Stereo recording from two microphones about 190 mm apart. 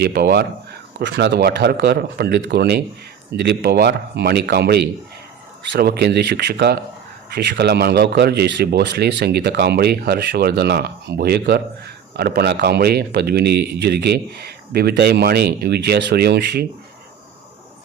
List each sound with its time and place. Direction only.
0.0 s speech: 55° right (ahead or behind)